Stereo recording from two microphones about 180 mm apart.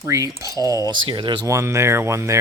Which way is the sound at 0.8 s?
25° right (ahead or behind).